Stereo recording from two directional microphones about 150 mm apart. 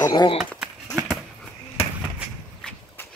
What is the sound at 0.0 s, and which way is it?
Speech, 30° left (ahead or behind).